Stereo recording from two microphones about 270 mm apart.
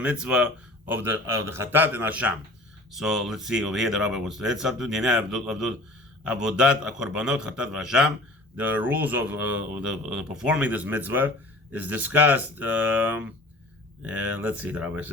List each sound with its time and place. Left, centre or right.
0.0 s speech: centre